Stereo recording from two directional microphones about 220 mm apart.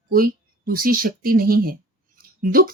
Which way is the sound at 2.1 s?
40° right (ahead or behind).